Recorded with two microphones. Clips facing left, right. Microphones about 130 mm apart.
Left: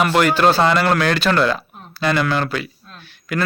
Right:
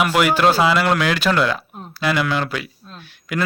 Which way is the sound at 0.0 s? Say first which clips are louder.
Left 1 dB; 10° right (ahead or behind).